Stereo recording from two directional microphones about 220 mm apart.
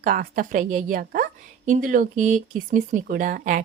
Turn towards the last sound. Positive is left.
turn(degrees=-40)  # may be behind; listen again after turning